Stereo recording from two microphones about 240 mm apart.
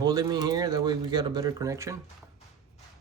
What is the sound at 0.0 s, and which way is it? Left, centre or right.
Speech, centre.